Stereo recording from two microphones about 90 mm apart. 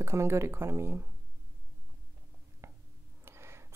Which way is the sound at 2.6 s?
30° right (ahead or behind).